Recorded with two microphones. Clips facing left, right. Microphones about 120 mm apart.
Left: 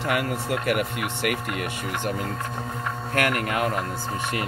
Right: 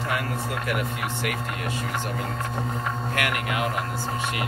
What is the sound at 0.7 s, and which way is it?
Speech, 60° left (ahead or behind).